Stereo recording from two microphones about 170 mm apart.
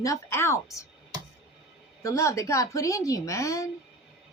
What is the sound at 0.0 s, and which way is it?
Speech, 15° left (ahead or behind).